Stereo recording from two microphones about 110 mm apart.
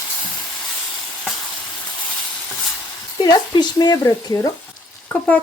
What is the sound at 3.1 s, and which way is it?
Speech, 40° left (ahead or behind).